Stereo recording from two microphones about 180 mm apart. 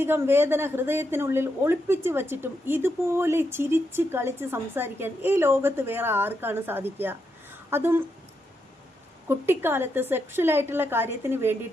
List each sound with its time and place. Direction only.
0.0 s speech: 10° right (ahead or behind)
9.3 s speech: 10° right (ahead or behind)